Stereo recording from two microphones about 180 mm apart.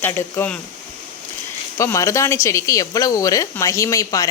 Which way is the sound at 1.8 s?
15° left (ahead or behind).